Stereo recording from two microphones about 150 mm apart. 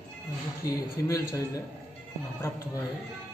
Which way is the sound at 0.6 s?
20° left (ahead or behind).